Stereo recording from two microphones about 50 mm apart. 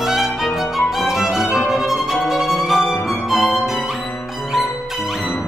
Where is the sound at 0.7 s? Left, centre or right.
Centre.